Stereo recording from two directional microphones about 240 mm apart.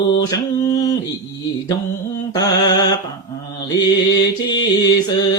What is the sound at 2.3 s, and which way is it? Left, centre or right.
Mantra, centre.